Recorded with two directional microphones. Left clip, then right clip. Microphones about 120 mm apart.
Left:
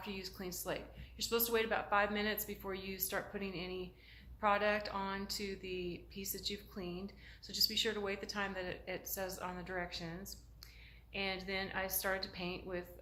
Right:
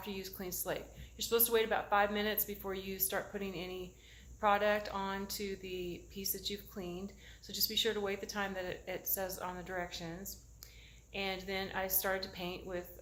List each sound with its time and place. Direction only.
0.0 s speech: 40° right (ahead or behind)